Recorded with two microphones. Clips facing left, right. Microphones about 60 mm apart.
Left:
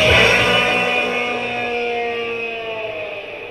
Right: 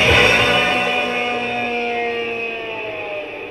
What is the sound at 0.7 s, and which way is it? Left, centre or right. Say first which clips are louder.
Music: even; centre.